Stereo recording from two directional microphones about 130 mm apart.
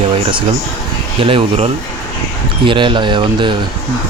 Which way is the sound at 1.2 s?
45° right (ahead or behind).